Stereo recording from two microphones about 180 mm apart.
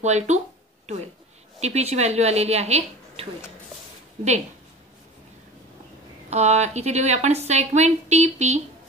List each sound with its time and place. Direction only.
0.0 s a woman's voice: 40° right (ahead or behind)
1.6 s a woman's voice: 35° right (ahead or behind)
6.3 s a woman's voice: 40° right (ahead or behind)